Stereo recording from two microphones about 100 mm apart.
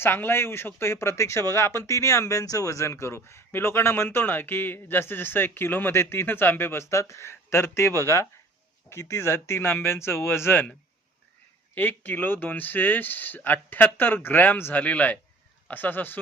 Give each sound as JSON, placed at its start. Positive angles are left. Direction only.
{"t": 0.0, "sound": "speech", "side_deg": 20}
{"t": 11.7, "sound": "speech", "side_deg": 20}